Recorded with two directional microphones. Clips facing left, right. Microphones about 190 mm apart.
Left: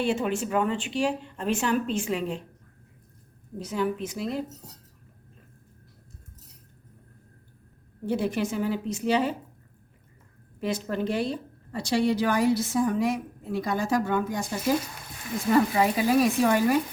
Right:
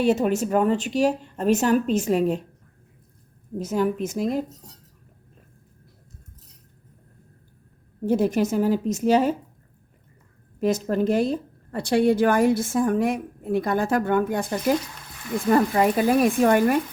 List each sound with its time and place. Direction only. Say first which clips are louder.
0.0 s speech: right 6 dB; 40° right (ahead or behind)
3.6 s a woman's voice: right 5 dB; 45° right (ahead or behind)
8.0 s a woman's voice: right 6 dB; 45° right (ahead or behind)
10.6 s a woman's voice: right 6 dB; 45° right (ahead or behind)
15.4 s a woman's voice: right 3 dB; 45° right (ahead or behind)